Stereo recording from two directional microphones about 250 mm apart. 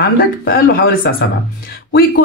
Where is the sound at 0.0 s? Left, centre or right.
Left.